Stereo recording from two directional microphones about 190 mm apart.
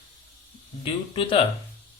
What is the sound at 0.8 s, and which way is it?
Speech, 25° left (ahead or behind).